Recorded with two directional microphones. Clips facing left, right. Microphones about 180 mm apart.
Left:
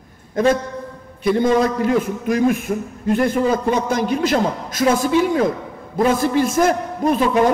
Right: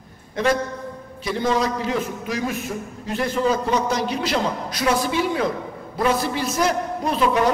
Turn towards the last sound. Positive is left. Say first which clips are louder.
# left 5 dB
turn(degrees=50)  # may be behind; listen again after turning